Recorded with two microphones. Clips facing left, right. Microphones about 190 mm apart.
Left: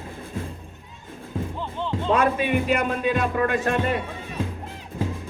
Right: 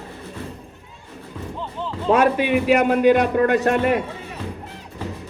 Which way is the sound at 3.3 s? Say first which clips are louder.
Right 5 dB; 45° right (ahead or behind).